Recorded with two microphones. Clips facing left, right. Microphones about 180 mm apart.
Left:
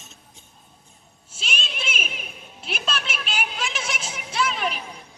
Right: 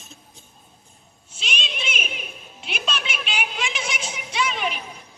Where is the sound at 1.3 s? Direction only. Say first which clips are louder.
Right 1 dB; 5° left (ahead or behind).